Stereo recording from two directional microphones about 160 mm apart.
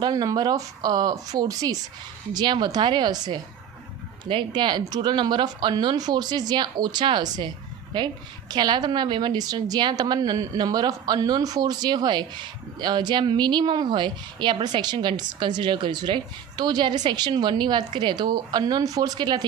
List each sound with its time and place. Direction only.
0.0 s speech: 25° right (ahead or behind)